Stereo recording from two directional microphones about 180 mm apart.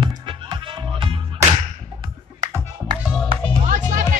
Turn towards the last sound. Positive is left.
turn(degrees=-45)  # may be behind; listen again after turning